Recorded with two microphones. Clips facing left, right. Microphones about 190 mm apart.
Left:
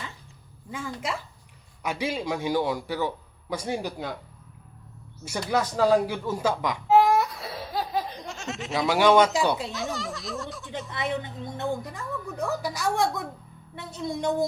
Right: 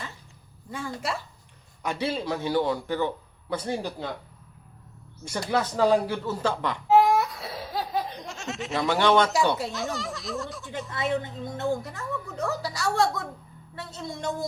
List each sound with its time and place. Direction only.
0.7 s a woman's voice: 15° left (ahead or behind)
5.2 s a woman's voice: 10° left (ahead or behind)
6.8 s laughter: centre (ahead or behind)
8.8 s a woman's voice: 10° left (ahead or behind)
9.7 s speech: centre (ahead or behind)
10.9 s a woman's voice: 20° left (ahead or behind)